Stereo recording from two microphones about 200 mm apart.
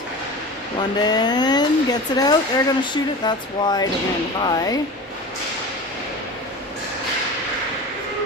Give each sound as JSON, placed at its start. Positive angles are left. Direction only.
{"t": 0.9, "sound": "speech", "side_deg": 20}